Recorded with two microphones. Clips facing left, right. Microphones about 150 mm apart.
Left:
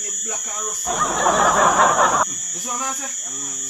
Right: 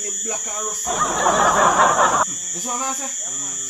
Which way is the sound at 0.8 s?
Centre (ahead or behind).